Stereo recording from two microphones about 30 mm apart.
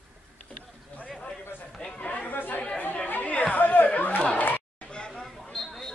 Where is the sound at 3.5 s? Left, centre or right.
Left.